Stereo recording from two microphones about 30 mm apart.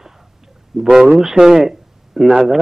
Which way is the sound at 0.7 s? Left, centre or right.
Centre.